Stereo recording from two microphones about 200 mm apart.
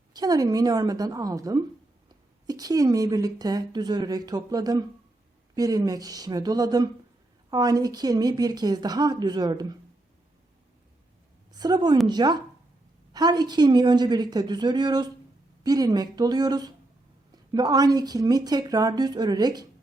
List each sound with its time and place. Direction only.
0.1 s speech: 20° right (ahead or behind)
11.5 s a woman's voice: 20° right (ahead or behind)